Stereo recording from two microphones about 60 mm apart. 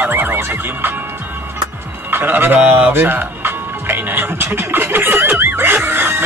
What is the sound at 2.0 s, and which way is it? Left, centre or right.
Speech, right.